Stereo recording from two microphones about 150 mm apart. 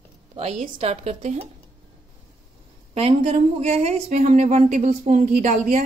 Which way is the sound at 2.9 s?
45° right (ahead or behind).